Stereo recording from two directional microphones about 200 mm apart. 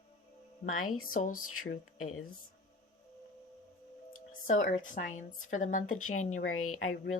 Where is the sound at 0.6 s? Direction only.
90° left.